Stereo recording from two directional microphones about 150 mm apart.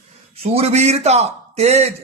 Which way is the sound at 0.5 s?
45° right (ahead or behind).